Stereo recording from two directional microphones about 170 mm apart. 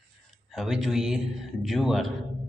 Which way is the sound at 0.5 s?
Centre (ahead or behind).